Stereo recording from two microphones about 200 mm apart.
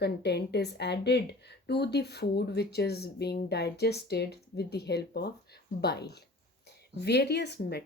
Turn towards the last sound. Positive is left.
turn(degrees=55)  # may be behind; listen again after turning